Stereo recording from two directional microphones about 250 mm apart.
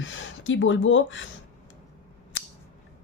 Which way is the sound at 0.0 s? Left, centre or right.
Left.